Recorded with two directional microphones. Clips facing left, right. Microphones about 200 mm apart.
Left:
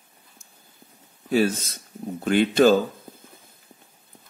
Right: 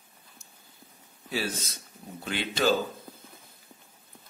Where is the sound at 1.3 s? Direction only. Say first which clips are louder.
Left 11 dB; 50° left (ahead or behind).